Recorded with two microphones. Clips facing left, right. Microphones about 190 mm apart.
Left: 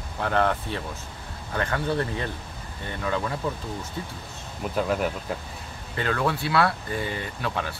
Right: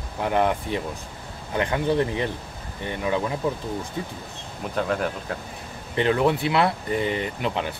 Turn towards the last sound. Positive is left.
turn(degrees=-20)  # may be behind; listen again after turning